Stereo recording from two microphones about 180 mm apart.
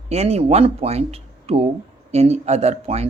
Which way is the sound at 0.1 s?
35° right (ahead or behind).